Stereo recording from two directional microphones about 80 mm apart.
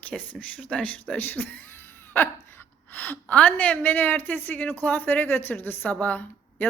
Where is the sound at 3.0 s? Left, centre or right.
Centre.